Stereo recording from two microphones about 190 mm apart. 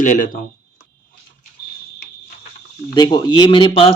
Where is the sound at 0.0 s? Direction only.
45° left (ahead or behind).